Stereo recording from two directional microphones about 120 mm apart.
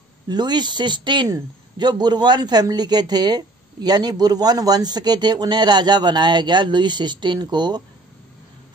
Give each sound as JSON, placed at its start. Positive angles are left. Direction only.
{"t": 0.3, "sound": "speech", "side_deg": -35}